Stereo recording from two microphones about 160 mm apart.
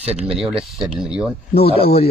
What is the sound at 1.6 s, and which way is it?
Speech, 35° left (ahead or behind).